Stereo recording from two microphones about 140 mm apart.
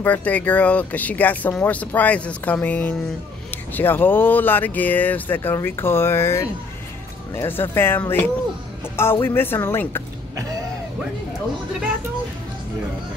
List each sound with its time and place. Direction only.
0.0 s speech: 10° left (ahead or behind)